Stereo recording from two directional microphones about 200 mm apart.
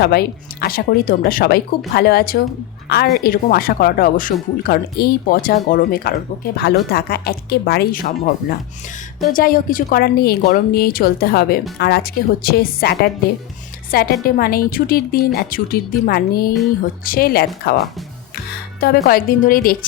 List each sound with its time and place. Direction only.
0.0 s speech: 50° left (ahead or behind)
19.0 s speech: 45° left (ahead or behind)